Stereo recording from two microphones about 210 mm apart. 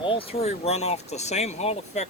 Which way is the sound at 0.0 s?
25° left (ahead or behind).